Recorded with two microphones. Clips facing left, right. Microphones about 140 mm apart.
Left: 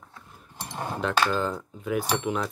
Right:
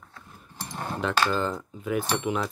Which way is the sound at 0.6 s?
20° left (ahead or behind).